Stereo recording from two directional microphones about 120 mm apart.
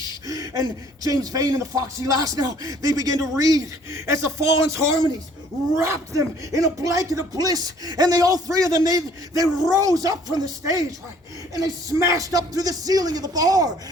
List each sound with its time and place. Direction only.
0.3 s speech: 30° right (ahead or behind)
11.5 s music: 30° right (ahead or behind)